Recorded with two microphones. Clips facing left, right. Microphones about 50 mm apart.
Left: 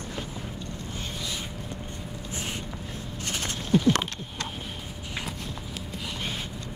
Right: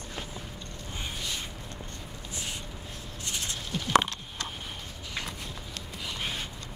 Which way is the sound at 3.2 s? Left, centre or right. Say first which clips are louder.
Left 4 dB; left.